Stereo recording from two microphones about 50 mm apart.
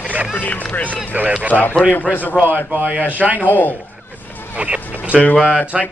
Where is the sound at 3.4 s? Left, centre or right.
Left.